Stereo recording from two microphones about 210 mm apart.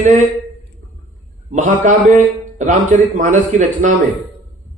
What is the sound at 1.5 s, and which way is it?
A man's voice, 35° right (ahead or behind).